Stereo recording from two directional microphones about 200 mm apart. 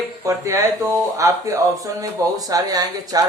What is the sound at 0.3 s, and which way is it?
Speech, 15° right (ahead or behind).